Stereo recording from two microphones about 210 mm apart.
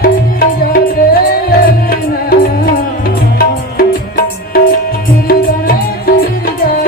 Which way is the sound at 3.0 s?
45° left (ahead or behind).